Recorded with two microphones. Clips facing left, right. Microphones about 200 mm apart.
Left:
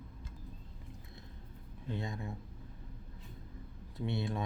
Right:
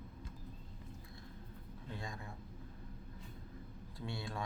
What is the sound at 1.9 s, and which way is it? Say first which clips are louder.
Speech: left 7 dB; 20° left (ahead or behind).